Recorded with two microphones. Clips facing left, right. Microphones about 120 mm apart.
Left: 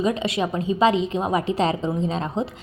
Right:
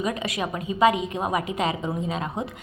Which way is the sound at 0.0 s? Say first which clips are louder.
Left 5 dB; 25° left (ahead or behind).